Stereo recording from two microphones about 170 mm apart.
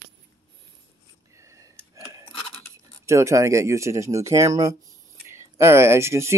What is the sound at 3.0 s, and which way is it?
Speech, 15° right (ahead or behind).